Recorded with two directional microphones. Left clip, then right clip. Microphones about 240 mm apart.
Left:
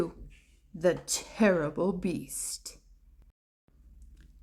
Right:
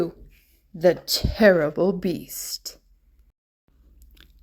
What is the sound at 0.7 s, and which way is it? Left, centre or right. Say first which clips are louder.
Speech: right 8 dB; centre.